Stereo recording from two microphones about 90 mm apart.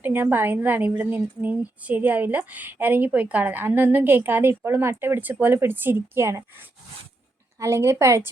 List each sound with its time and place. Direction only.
0.0 s a woman's voice: 20° right (ahead or behind)